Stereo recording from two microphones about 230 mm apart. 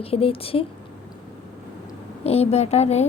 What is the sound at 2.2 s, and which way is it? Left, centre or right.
Speech, left.